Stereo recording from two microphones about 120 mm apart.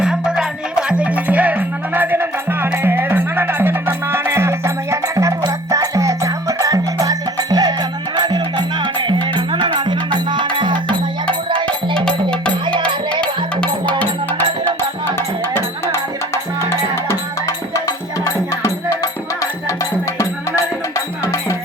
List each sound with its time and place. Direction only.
0.0 s music: 5° right (ahead or behind); by 10.9 s 40° right (ahead or behind)
13.2 s music: 10° left (ahead or behind)